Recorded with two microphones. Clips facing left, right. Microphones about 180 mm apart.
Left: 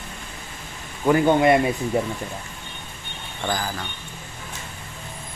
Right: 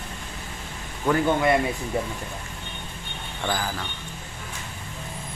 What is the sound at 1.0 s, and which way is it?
Speech, 20° left (ahead or behind).